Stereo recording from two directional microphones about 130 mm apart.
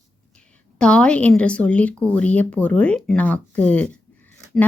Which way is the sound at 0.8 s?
10° left (ahead or behind).